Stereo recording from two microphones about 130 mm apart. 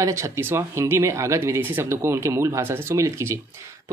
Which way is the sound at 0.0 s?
20° right (ahead or behind).